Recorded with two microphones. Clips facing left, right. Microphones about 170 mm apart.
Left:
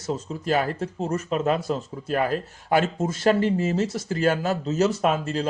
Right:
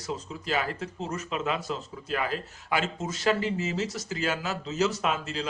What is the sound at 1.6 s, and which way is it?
Speech, 45° left (ahead or behind).